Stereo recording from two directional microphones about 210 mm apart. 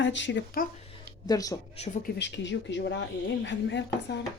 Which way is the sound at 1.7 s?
30° left (ahead or behind).